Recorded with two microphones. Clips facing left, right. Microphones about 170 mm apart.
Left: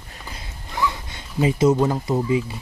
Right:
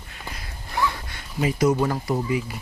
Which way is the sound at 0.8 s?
20° left (ahead or behind).